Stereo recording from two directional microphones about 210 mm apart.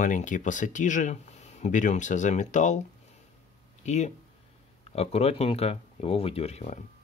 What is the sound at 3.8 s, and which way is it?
Speech, 35° left (ahead or behind).